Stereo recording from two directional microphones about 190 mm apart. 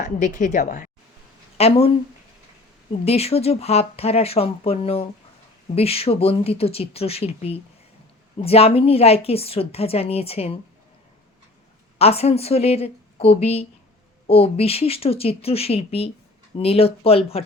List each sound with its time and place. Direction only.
0.0 s a woman's voice: 45° left (ahead or behind)
1.5 s a woman's voice: 30° left (ahead or behind)
3.0 s a woman's voice: 30° left (ahead or behind)
11.9 s a woman's voice: 30° left (ahead or behind)